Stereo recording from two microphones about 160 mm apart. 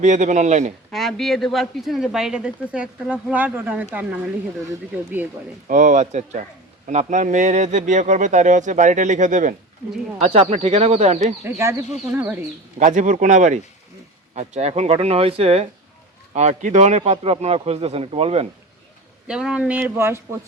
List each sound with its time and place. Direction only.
0.0 s speech: 50° right (ahead or behind)
0.9 s speech: centre (ahead or behind)
5.6 s speech: 55° right (ahead or behind)
10.2 s speech: 40° right (ahead or behind)
11.4 s speech: 15° right (ahead or behind)
12.8 s speech: 50° right (ahead or behind)
19.3 s speech: 5° right (ahead or behind)